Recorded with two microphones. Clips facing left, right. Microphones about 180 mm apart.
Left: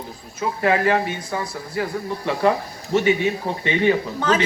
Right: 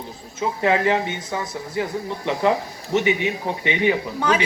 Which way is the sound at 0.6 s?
20° right (ahead or behind).